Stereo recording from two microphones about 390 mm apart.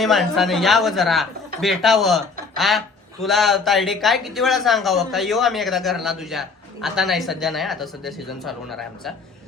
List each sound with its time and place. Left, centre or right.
0.0 s speech: centre